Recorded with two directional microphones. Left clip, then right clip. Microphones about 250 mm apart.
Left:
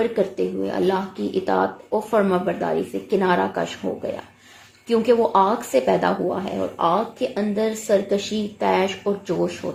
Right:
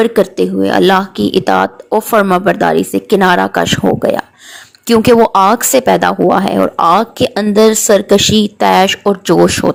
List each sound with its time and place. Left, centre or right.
0.0 s speech: right